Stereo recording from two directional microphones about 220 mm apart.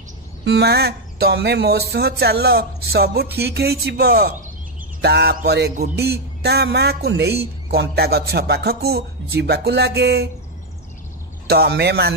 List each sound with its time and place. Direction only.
0.5 s speech: 50° right (ahead or behind)
11.4 s speech: 45° right (ahead or behind)